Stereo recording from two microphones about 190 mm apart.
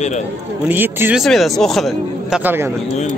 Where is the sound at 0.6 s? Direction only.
10° right (ahead or behind).